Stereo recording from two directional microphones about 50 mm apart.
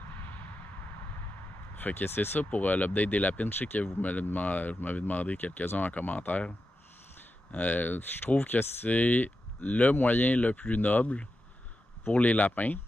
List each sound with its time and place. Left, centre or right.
0.1 s a sound: left
1.8 s speech: left
3.4 s speech: left
4.0 s speech: left
7.5 s speech: left